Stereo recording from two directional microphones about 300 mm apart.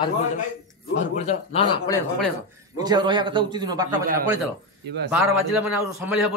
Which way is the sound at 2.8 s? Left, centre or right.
Centre.